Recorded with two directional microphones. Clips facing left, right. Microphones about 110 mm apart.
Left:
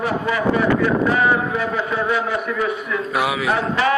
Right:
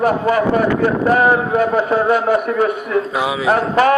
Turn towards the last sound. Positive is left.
turn(degrees=-45)  # may be behind; listen again after turning